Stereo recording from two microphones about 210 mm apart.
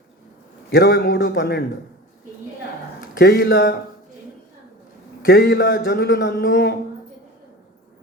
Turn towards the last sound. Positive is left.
turn(degrees=55)  # may be behind; listen again after turning